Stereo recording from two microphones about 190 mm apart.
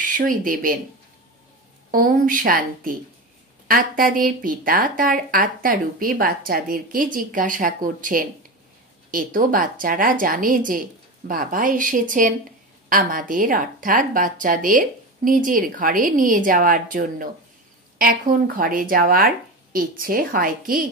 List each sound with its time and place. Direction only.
0.0 s speech: 45° right (ahead or behind)
1.9 s speech: 50° right (ahead or behind)
18.5 s speech: 50° right (ahead or behind)